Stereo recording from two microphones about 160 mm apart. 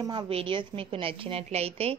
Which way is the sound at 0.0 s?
25° right (ahead or behind).